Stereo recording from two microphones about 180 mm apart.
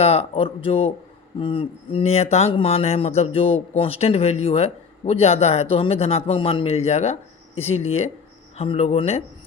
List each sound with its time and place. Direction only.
0.0 s speech: 35° left (ahead or behind)